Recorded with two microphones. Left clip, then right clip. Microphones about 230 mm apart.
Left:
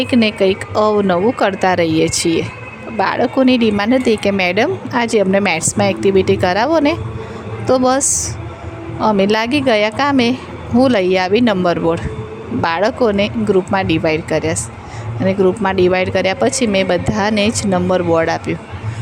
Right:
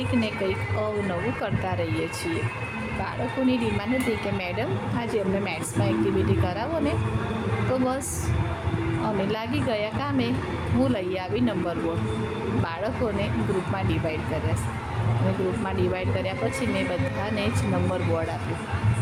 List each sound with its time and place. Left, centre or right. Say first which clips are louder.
0.0 s speech: left 13 dB; left
9.0 s speech: left 17 dB; left
15.6 s speech: left 13 dB; left